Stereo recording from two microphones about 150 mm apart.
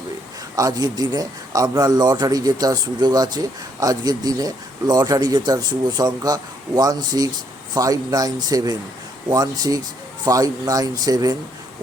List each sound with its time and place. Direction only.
0.5 s a man's voice: 25° right (ahead or behind)